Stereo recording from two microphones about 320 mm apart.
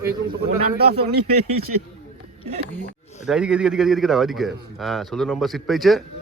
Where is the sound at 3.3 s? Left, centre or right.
Centre.